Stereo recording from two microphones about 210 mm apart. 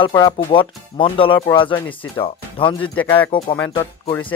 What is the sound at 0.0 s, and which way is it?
Speech, 20° left (ahead or behind).